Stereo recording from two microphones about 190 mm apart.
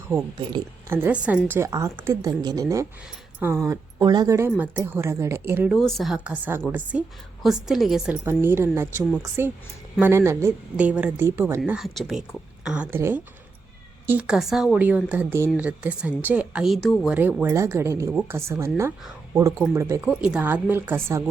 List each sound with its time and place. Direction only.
0.9 s a woman's voice: 10° right (ahead or behind)
17.2 s a woman's voice: 10° right (ahead or behind)